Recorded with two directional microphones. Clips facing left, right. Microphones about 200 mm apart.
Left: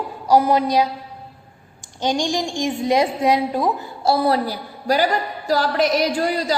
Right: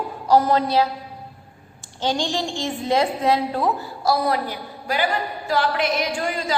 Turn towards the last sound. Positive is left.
turn(degrees=35)  # may be behind; listen again after turning